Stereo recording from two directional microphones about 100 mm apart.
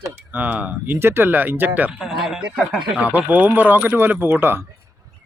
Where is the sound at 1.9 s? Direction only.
5° right (ahead or behind).